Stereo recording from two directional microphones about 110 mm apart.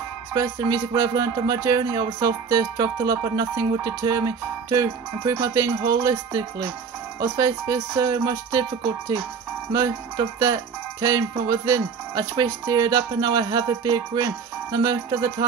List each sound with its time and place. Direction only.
0.3 s speech: 35° right (ahead or behind)